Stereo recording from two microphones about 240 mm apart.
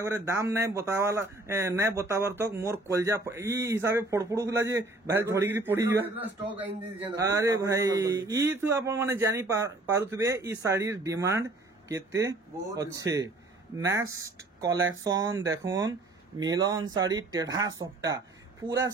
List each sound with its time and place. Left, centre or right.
0.0 s speech: centre
14.8 s speech: right
15.1 s speech: centre